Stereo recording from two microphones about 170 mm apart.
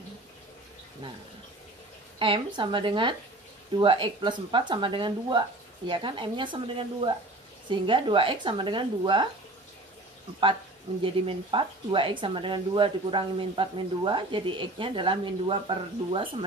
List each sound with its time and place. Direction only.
2.1 s speech: 30° right (ahead or behind)
11.2 s speech: 30° right (ahead or behind)